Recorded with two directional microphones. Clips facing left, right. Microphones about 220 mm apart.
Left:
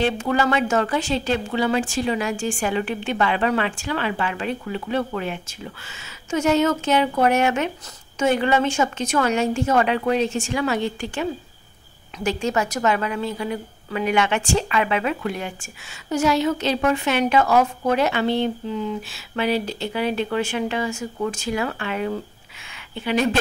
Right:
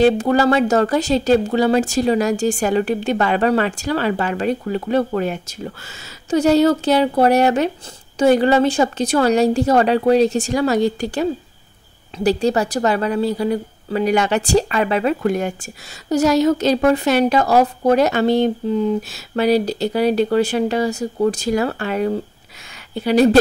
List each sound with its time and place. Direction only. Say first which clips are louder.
0.0 s a woman's voice: right 7 dB; 40° right (ahead or behind)